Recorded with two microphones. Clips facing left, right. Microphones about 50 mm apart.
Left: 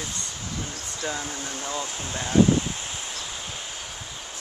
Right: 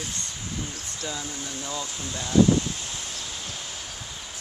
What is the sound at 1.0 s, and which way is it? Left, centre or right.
Speech, left.